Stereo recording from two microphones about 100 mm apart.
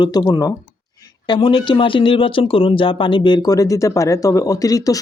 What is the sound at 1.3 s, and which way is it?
Speech, 60° left (ahead or behind).